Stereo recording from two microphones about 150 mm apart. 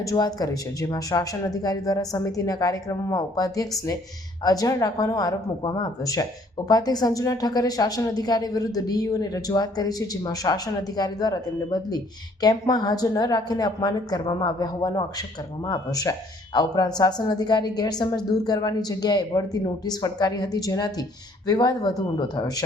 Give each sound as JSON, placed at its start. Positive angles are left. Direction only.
{"t": 0.0, "sound": "a woman's voice", "side_deg": 25}